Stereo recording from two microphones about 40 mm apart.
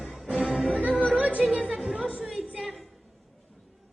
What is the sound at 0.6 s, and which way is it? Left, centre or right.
Music, right.